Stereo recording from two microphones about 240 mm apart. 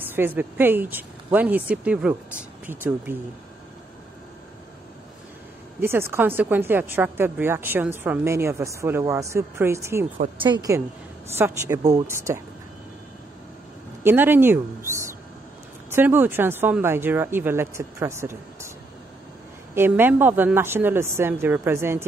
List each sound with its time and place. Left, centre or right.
0.0 s a woman's voice: centre
5.8 s a woman's voice: centre
14.0 s a woman's voice: centre
19.7 s a woman's voice: centre